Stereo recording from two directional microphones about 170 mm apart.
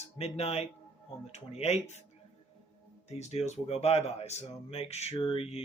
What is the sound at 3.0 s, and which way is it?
Speech, 40° left (ahead or behind).